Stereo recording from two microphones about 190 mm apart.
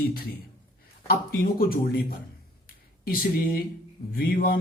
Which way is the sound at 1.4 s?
50° left (ahead or behind).